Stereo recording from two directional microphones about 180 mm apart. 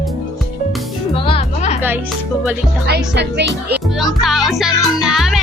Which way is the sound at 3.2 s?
70° right (ahead or behind).